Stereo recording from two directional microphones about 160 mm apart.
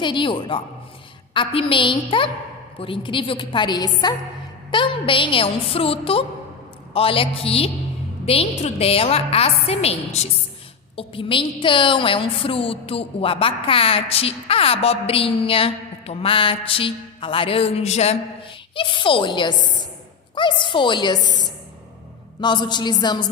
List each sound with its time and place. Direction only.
0.0 s a woman's voice: 30° left (ahead or behind)
18.7 s a woman's voice: 30° left (ahead or behind)
22.4 s a woman's voice: 30° left (ahead or behind)